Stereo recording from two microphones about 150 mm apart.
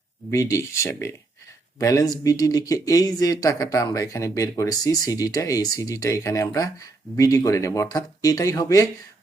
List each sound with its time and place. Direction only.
0.3 s speech: 20° left (ahead or behind)